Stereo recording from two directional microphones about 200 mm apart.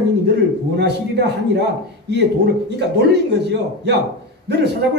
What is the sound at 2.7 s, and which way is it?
A woman's voice, 55° right (ahead or behind).